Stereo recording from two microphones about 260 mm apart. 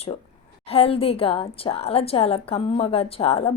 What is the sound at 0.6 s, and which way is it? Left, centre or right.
A woman's voice, left.